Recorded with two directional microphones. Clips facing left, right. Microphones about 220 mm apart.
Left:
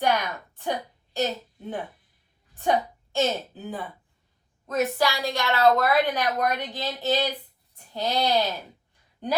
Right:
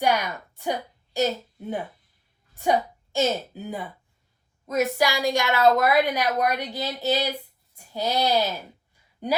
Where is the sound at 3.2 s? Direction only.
10° right (ahead or behind).